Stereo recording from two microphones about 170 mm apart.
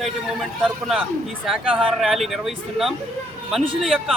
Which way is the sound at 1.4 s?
Centre (ahead or behind).